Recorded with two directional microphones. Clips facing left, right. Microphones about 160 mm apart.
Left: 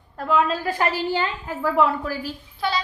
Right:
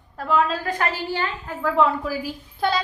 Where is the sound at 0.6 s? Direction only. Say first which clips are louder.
Left 2 dB; 15° left (ahead or behind).